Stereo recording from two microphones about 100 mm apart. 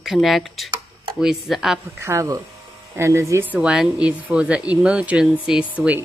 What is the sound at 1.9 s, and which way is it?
Speech, 30° right (ahead or behind).